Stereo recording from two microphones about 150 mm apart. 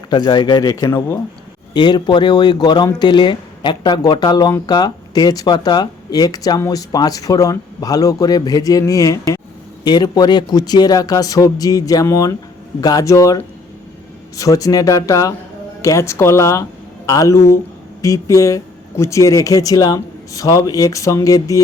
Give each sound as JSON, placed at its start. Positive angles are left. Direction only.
{"t": 0.1, "sound": "speech", "side_deg": 30}
{"t": 1.7, "sound": "speech", "side_deg": 30}